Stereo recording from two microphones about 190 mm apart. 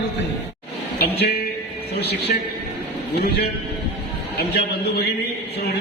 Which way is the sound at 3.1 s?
55° left (ahead or behind).